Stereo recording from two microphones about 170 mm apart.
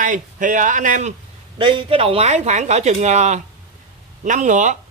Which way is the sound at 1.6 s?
30° right (ahead or behind).